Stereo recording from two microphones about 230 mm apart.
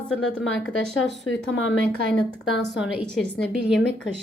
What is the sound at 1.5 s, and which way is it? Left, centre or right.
Speech, left.